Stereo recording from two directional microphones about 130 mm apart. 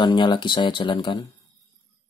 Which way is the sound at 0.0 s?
35° left (ahead or behind).